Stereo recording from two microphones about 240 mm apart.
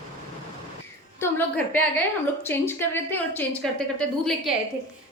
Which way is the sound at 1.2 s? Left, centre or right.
Centre.